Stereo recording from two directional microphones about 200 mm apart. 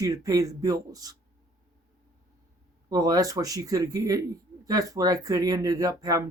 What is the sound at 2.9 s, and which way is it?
A man's voice, 20° right (ahead or behind).